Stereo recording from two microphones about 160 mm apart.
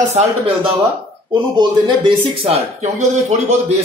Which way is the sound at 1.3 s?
30° right (ahead or behind).